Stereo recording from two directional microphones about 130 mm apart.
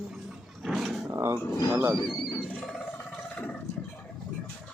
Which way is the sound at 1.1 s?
20° right (ahead or behind).